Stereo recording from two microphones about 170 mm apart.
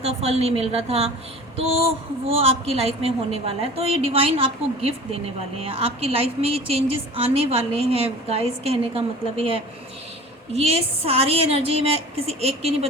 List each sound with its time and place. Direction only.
0.0 s a woman's voice: 40° right (ahead or behind)
2.2 s a woman's voice: 35° right (ahead or behind)
11.0 s a woman's voice: 35° right (ahead or behind)